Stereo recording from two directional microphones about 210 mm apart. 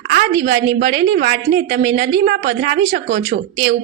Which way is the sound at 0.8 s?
55° right (ahead or behind).